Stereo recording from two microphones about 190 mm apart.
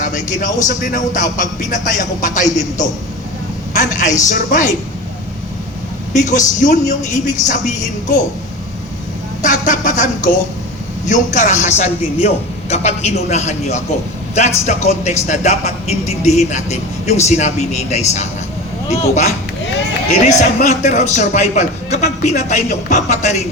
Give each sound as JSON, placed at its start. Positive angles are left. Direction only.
{"t": 0.0, "sound": "a man's voice", "side_deg": 40}
{"t": 6.1, "sound": "a man's voice", "side_deg": 40}
{"t": 9.4, "sound": "a man's voice", "side_deg": 40}